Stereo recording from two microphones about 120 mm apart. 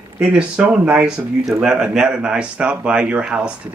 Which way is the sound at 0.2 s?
5° right (ahead or behind).